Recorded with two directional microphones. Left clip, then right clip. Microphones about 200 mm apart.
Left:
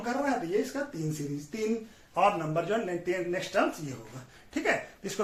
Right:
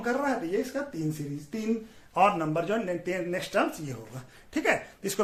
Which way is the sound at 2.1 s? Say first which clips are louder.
Right 2 dB; 60° right (ahead or behind).